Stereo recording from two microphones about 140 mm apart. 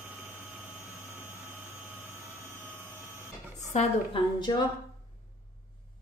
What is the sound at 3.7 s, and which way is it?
Speech, 55° left (ahead or behind).